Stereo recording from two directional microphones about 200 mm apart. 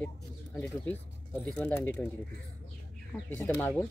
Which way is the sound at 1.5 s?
10° left (ahead or behind).